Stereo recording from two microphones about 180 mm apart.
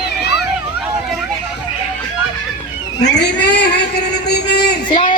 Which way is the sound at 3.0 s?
70° left (ahead or behind).